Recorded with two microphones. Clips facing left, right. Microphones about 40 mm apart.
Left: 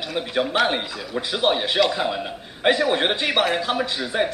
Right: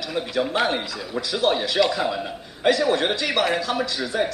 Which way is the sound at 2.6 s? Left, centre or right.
Left.